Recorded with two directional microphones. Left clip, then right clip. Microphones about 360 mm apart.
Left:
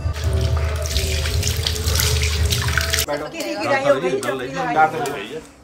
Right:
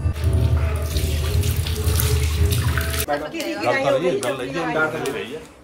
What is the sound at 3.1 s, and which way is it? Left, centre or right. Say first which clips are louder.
A man's voice: even; centre.